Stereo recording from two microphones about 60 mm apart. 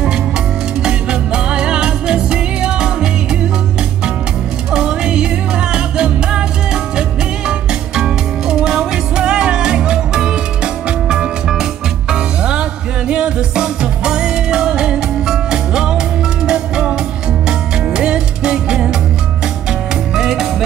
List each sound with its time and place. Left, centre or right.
0.8 s music: centre
4.7 s music: centre
20.2 s music: centre